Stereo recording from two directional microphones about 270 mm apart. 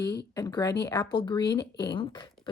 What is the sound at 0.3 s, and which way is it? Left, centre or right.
Speech, centre.